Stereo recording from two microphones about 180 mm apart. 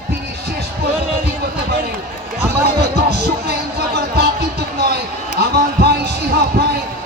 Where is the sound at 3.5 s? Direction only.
65° right (ahead or behind).